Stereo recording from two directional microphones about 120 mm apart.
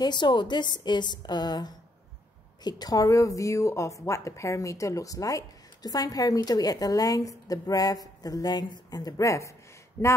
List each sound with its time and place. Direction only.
0.0 s a woman's voice: 40° left (ahead or behind); by 10.1 s 20° left (ahead or behind)